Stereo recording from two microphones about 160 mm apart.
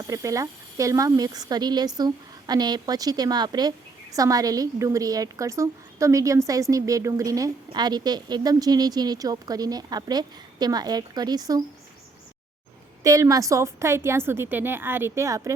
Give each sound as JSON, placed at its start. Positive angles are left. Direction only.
{"t": 0.1, "sound": "speech", "side_deg": -20}
{"t": 13.0, "sound": "a woman's voice", "side_deg": -20}